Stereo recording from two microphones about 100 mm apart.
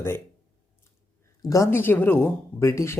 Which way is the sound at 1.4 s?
35° left (ahead or behind).